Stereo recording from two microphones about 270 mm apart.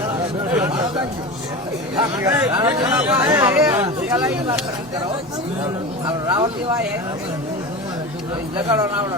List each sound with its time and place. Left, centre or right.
2.0 s speech: centre
6.1 s speech: centre